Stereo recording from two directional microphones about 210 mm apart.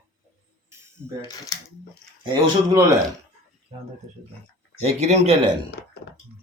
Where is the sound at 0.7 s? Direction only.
10° right (ahead or behind).